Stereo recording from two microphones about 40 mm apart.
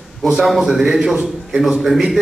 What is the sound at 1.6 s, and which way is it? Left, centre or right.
Speech, centre.